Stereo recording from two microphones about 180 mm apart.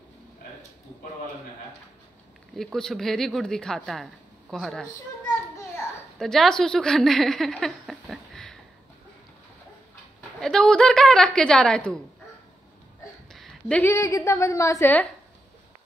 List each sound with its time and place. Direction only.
2.5 s speech: centre (ahead or behind)
6.1 s a woman's voice: centre (ahead or behind)
10.4 s speech: 5° left (ahead or behind)
13.3 s a sound: 5° left (ahead or behind)
13.9 s a woman's voice: 15° left (ahead or behind)